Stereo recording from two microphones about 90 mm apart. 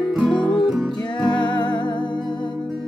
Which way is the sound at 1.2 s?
60° left (ahead or behind).